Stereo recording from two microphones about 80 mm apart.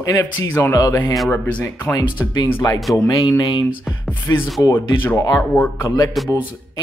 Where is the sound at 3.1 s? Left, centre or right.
Left.